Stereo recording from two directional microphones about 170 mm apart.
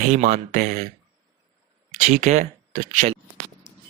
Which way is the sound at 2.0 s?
45° right (ahead or behind).